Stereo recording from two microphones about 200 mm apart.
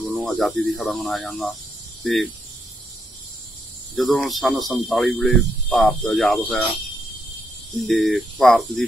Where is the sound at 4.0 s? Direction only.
Centre (ahead or behind).